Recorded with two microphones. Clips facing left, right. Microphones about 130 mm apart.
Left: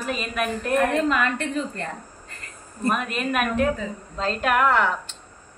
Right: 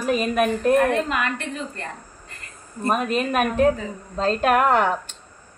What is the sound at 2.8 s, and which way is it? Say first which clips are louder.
A woman's voice: right 3 dB; 40° right (ahead or behind).